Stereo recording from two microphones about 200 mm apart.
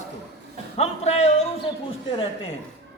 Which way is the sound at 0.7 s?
30° left (ahead or behind).